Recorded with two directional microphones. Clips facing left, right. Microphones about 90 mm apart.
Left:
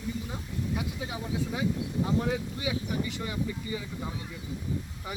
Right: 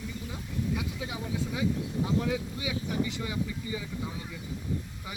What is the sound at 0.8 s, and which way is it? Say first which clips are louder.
Speech: left 1 dB; 30° left (ahead or behind).